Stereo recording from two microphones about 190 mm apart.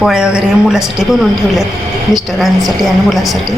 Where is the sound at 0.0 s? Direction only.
5° right (ahead or behind).